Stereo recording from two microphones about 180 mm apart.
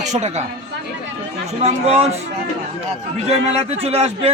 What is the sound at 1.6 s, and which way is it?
Speech, 35° right (ahead or behind).